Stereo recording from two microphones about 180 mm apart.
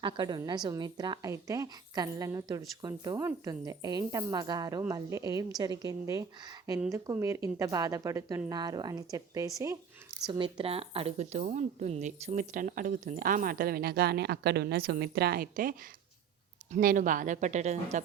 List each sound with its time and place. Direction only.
0.0 s a woman's voice: 25° right (ahead or behind)
10.3 s speech: 30° right (ahead or behind); by 15.7 s 50° right (ahead or behind)
16.7 s speech: 50° right (ahead or behind)